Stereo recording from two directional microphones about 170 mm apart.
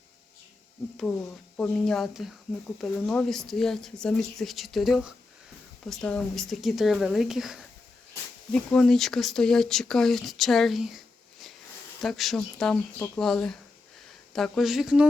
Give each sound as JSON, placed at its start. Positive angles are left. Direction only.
{"t": 1.5, "sound": "speech", "side_deg": 5}